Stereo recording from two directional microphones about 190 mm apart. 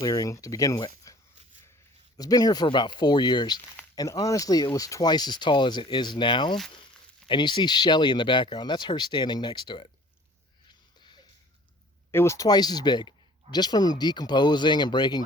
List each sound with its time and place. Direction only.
0.0 s speech: 20° left (ahead or behind)
2.1 s speech: 20° left (ahead or behind)
12.1 s speech: 15° left (ahead or behind)